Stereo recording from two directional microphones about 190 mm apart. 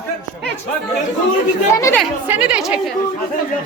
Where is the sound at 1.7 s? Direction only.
15° left (ahead or behind).